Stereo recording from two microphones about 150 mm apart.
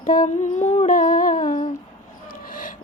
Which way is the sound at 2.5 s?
65° left (ahead or behind).